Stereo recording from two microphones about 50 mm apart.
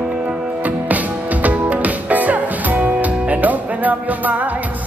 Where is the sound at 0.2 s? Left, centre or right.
Right.